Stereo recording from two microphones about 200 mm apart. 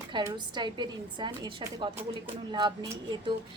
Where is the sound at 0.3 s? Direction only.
20° right (ahead or behind).